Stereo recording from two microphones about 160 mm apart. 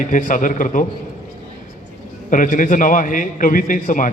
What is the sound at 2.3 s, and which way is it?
A man's voice, 55° left (ahead or behind).